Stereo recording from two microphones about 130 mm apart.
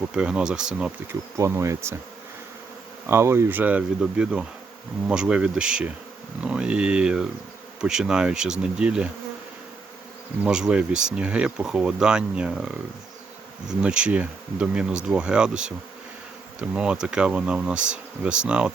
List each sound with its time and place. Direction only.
0.1 s speech: 5° right (ahead or behind)
1.4 s bee: 20° right (ahead or behind)
3.1 s speech: 20° right (ahead or behind)
10.4 s speech: 5° right (ahead or behind)
13.8 s speech: 10° right (ahead or behind)